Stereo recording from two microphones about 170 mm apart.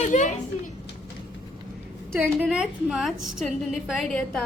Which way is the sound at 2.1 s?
15° right (ahead or behind).